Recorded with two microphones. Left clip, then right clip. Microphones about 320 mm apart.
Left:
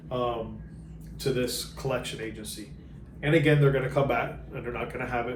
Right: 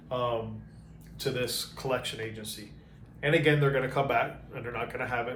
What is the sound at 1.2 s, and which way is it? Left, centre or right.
Speech, centre.